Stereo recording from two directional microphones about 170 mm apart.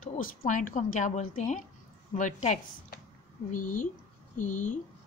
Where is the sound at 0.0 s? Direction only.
45° left (ahead or behind).